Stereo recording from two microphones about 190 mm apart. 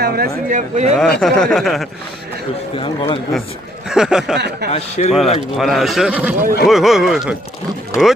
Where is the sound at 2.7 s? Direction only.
30° left (ahead or behind).